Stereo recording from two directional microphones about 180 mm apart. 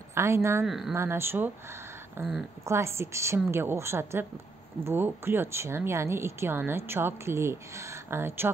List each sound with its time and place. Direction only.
0.1 s speech: 15° right (ahead or behind)
0.7 s speech: centre (ahead or behind)
0.9 s speech: 15° right (ahead or behind)